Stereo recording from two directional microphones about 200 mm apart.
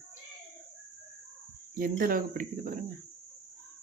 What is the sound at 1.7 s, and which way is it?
Speech, 45° right (ahead or behind).